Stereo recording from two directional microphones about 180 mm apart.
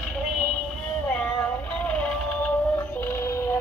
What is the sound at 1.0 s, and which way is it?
Female singing, 5° left (ahead or behind).